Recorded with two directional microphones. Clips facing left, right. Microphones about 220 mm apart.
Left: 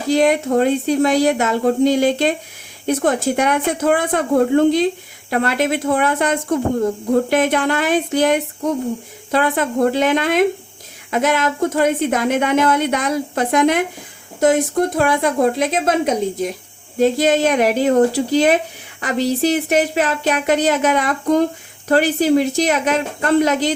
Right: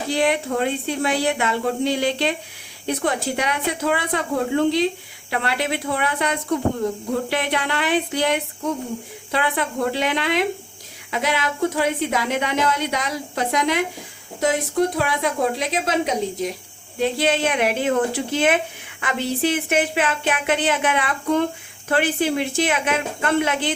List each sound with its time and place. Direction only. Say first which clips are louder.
0.1 s a woman's voice: left 7 dB; 40° left (ahead or behind)